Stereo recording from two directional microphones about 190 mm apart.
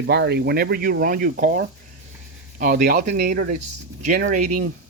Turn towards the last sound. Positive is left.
turn(degrees=-40)  # may be behind; listen again after turning